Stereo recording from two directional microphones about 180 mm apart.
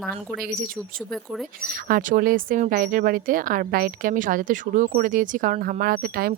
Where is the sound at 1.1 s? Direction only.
Centre (ahead or behind).